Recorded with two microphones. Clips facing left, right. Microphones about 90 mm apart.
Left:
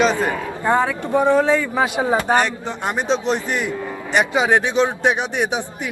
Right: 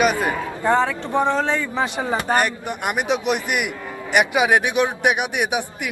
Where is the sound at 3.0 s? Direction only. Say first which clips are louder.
Left 2 dB; 15° right (ahead or behind).